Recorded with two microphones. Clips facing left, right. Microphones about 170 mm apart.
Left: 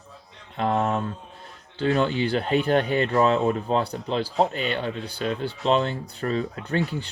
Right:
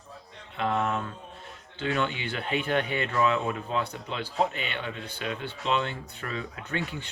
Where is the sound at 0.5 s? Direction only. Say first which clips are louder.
Left 4 dB; 40° left (ahead or behind).